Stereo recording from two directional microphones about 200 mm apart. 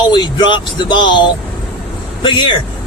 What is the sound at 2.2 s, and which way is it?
Speech, 25° left (ahead or behind).